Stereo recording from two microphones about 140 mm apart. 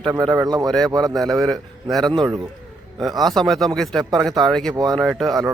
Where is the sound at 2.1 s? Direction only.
35° right (ahead or behind).